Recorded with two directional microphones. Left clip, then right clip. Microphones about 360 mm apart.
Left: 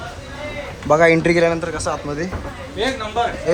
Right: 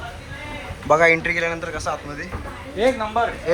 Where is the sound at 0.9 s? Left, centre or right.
Centre.